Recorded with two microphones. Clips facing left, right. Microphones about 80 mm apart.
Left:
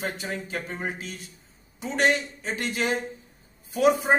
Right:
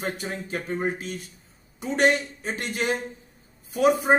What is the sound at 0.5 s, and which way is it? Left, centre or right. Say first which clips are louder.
A man's voice: right 4 dB; right.